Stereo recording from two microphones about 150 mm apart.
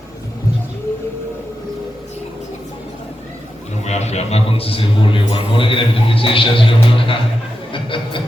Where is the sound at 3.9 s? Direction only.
45° left (ahead or behind).